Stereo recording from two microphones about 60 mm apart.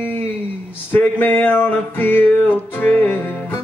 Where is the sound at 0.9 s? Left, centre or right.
Left.